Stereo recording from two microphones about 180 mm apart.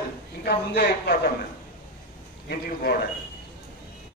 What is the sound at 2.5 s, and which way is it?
Speech, 60° left (ahead or behind).